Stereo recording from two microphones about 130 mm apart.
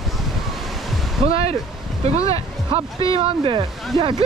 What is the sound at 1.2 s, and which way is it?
Speech, 50° right (ahead or behind).